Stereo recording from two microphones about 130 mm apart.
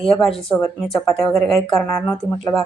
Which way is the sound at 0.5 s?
20° left (ahead or behind).